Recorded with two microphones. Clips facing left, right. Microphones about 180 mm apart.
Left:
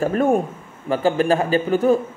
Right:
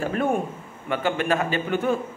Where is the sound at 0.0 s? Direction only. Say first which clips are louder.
Left 6 dB; 40° left (ahead or behind).